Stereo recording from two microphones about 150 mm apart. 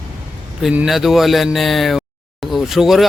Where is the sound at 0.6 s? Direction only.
5° right (ahead or behind).